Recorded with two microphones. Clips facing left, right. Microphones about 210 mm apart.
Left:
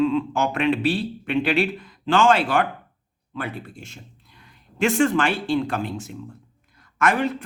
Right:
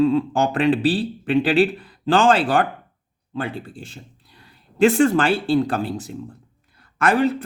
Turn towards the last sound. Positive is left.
turn(degrees=-35)  # may be behind; listen again after turning